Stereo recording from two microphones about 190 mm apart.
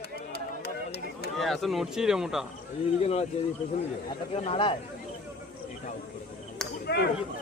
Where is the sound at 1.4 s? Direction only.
Centre (ahead or behind).